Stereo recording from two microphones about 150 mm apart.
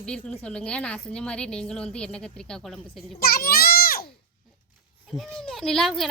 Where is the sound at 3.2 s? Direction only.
90° left.